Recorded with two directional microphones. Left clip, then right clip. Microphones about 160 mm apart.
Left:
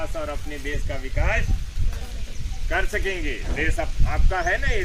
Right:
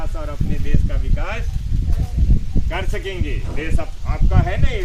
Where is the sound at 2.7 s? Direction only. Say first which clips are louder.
Left 3 dB; 50° right (ahead or behind).